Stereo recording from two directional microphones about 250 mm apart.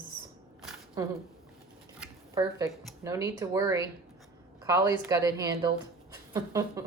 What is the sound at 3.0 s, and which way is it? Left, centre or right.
A woman's voice, centre.